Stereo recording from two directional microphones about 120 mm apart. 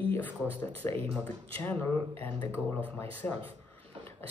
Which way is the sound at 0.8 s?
15° left (ahead or behind).